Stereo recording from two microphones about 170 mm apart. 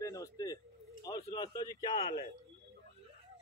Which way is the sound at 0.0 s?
20° left (ahead or behind).